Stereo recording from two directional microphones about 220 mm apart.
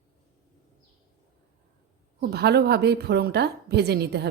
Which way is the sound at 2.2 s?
50° right (ahead or behind).